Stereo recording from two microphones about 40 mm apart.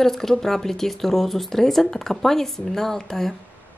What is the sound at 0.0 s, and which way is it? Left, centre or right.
Speech, centre.